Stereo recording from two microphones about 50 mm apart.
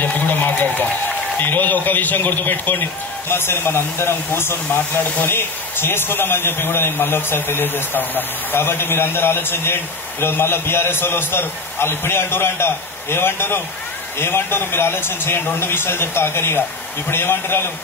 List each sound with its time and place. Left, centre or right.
0.0 s a man's voice: left